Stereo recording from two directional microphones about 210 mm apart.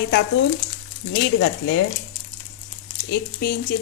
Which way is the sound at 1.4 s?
55° left (ahead or behind).